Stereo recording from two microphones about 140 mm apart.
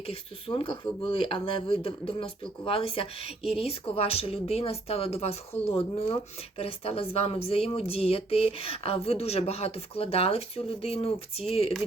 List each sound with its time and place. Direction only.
0.0 s a woman's voice: 40° left (ahead or behind)